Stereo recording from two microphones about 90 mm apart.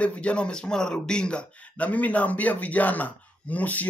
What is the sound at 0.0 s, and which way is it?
A man's voice, 15° left (ahead or behind).